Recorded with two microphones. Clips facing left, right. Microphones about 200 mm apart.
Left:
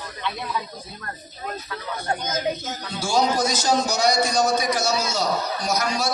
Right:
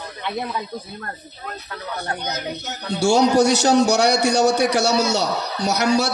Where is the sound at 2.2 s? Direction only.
70° right (ahead or behind).